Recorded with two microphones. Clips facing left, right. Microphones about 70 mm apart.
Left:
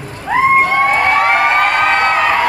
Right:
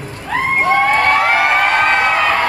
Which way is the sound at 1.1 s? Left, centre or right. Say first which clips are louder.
Left 1 dB; centre.